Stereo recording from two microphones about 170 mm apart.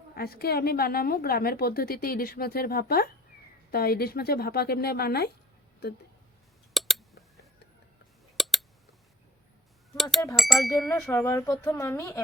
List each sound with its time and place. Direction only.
0.2 s a woman's voice: 65° left (ahead or behind)
6.7 s a sound: centre (ahead or behind)
10.0 s speech: centre (ahead or behind)